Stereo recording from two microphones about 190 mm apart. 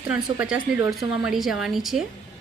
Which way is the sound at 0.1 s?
5° right (ahead or behind).